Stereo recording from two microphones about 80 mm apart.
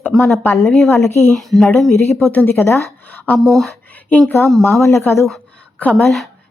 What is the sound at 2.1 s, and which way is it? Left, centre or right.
Speech, left.